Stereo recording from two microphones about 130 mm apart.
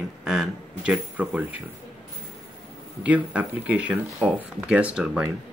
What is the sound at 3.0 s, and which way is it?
Speech, 10° right (ahead or behind).